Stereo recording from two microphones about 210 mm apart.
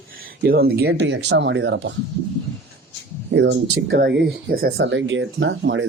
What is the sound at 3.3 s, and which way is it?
Speech, 55° right (ahead or behind).